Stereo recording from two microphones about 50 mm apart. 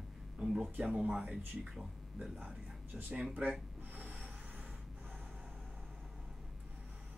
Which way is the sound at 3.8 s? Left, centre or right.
Right.